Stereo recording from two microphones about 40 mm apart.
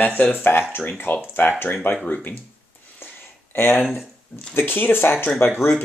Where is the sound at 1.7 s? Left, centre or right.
Left.